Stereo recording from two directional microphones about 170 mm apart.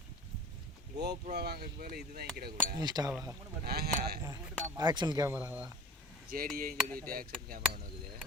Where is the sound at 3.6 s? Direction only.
70° right (ahead or behind).